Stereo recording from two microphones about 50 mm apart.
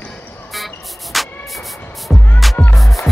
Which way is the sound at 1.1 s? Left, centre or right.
Centre.